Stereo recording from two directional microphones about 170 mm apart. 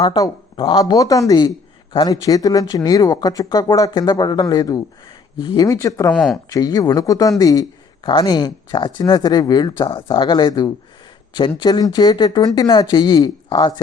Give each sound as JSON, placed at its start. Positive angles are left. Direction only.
{"t": 0.0, "sound": "a man's voice", "side_deg": 25}
{"t": 6.1, "sound": "speech", "side_deg": 0}
{"t": 6.5, "sound": "a man's voice", "side_deg": 20}